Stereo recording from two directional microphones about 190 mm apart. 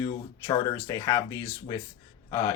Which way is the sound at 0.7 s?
15° left (ahead or behind).